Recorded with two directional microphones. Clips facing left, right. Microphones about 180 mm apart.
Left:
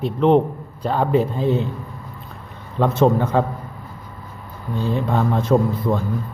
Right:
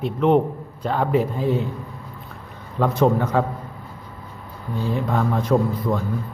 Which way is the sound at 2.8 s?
25° left (ahead or behind).